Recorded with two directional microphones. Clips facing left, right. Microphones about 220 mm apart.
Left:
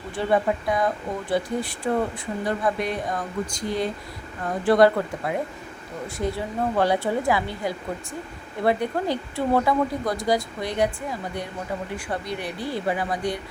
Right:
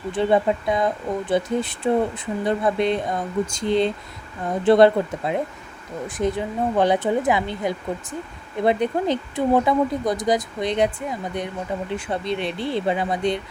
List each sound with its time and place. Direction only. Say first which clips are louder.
0.1 s speech: right 3 dB; 20° right (ahead or behind)